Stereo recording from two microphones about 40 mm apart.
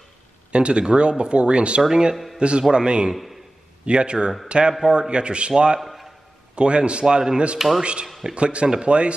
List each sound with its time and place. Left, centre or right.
0.5 s a man's voice: right
5.8 s a sound: centre
6.5 s speech: right
7.5 s speech: centre
7.8 s speech: right